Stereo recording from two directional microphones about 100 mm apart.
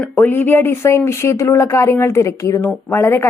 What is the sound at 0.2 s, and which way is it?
Speech, 20° left (ahead or behind).